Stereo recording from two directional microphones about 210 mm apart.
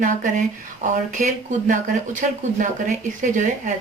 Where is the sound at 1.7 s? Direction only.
35° right (ahead or behind).